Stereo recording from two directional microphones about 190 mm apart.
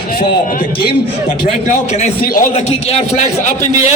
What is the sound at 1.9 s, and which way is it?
Speech, 35° left (ahead or behind).